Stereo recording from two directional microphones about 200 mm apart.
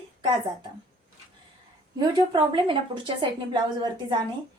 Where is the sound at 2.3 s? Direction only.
25° right (ahead or behind).